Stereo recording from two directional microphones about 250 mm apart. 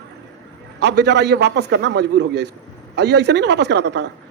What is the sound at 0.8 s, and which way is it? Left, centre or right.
A man's voice, right.